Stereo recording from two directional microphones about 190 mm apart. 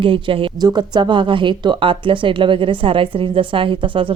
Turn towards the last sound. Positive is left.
turn(degrees=-25)  # may be behind; listen again after turning